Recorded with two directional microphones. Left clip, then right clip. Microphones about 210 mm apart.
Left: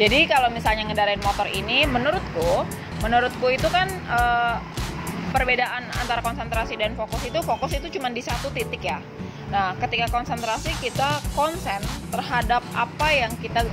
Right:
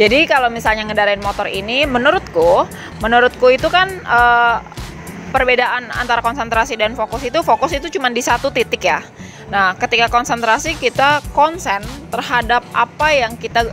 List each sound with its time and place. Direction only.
0.0 s speech: 50° right (ahead or behind)